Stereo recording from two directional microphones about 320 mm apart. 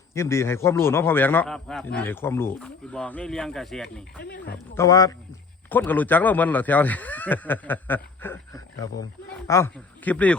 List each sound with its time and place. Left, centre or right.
0.1 s a man's voice: centre
4.2 s speech: left
4.5 s a man's voice: centre